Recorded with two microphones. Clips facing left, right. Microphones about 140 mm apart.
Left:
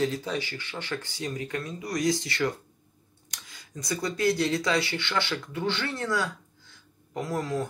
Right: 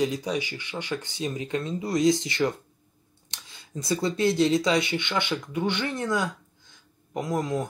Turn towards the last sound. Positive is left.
turn(degrees=-15)  # may be behind; listen again after turning